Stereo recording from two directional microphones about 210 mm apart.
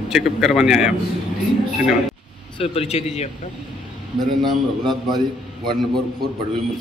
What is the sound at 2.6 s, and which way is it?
Speech, 30° left (ahead or behind).